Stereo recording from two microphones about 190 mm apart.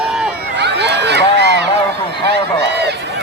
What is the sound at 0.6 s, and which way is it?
Run, 60° right (ahead or behind).